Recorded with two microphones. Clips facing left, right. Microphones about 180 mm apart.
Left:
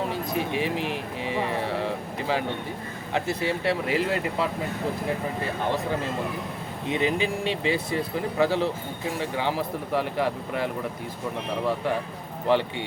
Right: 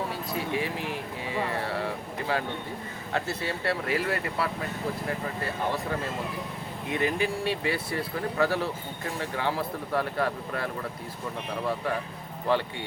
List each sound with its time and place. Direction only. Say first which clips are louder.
0.0 s a sound: left 4 dB; 20° left (ahead or behind)
3.1 s speech: left 4 dB; 15° left (ahead or behind)
6.8 s speech: left 2 dB; 20° left (ahead or behind)
12.5 s speech: left 4 dB; 15° left (ahead or behind)